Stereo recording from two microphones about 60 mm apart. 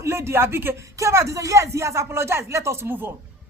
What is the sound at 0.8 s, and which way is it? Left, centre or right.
Speech, right.